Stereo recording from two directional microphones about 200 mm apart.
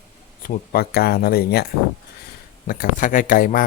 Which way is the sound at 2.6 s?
45° left (ahead or behind).